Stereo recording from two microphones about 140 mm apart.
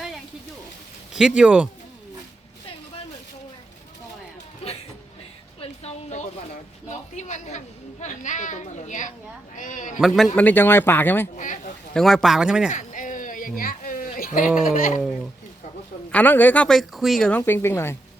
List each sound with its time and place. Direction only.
1.4 s speech: 5° right (ahead or behind)
5.5 s a sound: 50° left (ahead or behind)
7.2 s a woman's voice: 55° left (ahead or behind)
10.3 s speech: 10° left (ahead or behind)
11.3 s a sound: 65° left (ahead or behind)
11.9 s speech: centre (ahead or behind)
12.7 s a sound: 65° left (ahead or behind)
14.4 s speech: 5° right (ahead or behind)
14.8 s a man's voice: 70° left (ahead or behind)
16.1 s speech: 10° left (ahead or behind)
17.2 s speech: 15° left (ahead or behind)